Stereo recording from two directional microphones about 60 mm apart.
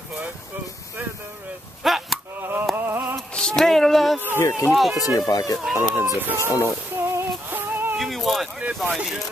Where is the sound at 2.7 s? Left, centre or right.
Right.